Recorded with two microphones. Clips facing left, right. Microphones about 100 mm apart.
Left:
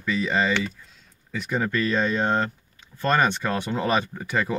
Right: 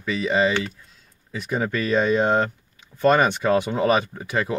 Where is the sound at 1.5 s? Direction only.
15° right (ahead or behind).